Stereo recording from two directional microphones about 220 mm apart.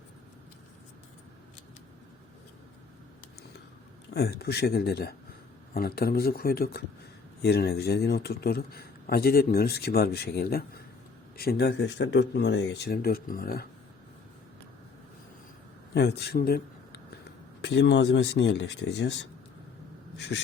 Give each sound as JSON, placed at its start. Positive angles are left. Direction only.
{"t": 4.1, "sound": "speech", "side_deg": 50}
{"t": 16.0, "sound": "speech", "side_deg": 50}
{"t": 20.1, "sound": "a sound", "side_deg": 50}